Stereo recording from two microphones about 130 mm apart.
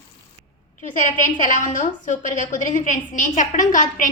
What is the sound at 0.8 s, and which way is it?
A woman's voice, 90° left.